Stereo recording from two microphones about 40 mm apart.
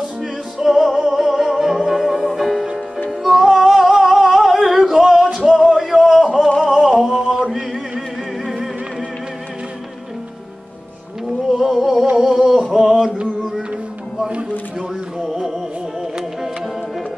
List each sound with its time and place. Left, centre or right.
0.2 s music: centre
5.7 s a sound: centre
6.9 s male singing: centre
7.3 s chant: centre
11.4 s a sound: centre
15.1 s music: centre